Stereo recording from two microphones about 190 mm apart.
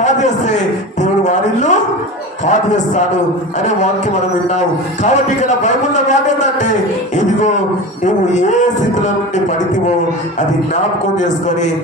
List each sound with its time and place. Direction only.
0.0 s a man's voice: 40° left (ahead or behind)
5.0 s a man's voice: 40° left (ahead or behind)
8.0 s a man's voice: 40° left (ahead or behind)